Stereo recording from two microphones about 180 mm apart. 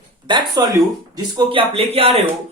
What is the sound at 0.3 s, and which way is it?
A woman's voice, 25° right (ahead or behind).